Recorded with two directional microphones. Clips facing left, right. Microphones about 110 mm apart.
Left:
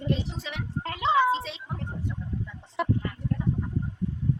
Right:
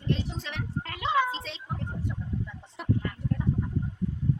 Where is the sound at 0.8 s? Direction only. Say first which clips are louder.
Left 4 dB; 30° left (ahead or behind).